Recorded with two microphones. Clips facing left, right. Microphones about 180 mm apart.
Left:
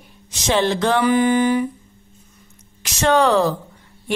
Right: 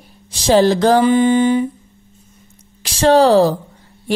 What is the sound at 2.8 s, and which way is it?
Speech, 35° right (ahead or behind).